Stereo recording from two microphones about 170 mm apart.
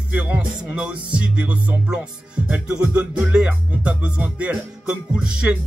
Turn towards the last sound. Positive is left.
turn(degrees=-5)  # may be behind; listen again after turning